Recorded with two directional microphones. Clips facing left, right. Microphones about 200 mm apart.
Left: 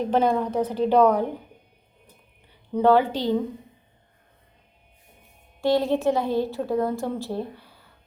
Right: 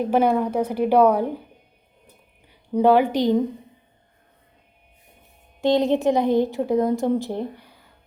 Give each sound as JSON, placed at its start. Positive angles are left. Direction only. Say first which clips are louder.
{"t": 0.0, "sound": "a woman's voice", "louder": "right 2 dB", "side_deg": -10}
{"t": 2.5, "sound": "a woman's voice", "louder": "right 2 dB", "side_deg": -15}
{"t": 5.5, "sound": "a woman's voice", "louder": "right 3 dB", "side_deg": -20}